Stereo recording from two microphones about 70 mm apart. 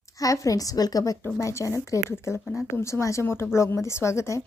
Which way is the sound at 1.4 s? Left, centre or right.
Left.